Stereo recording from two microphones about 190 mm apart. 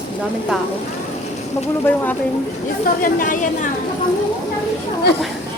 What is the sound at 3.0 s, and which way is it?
Speech, 45° left (ahead or behind).